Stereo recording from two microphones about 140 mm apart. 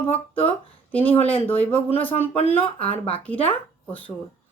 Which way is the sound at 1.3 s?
10° left (ahead or behind).